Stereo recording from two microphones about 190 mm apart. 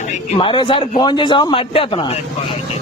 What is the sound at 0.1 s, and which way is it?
A man's voice, 25° left (ahead or behind).